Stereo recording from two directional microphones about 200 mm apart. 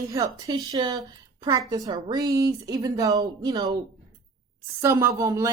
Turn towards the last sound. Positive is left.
turn(degrees=-15)  # may be behind; listen again after turning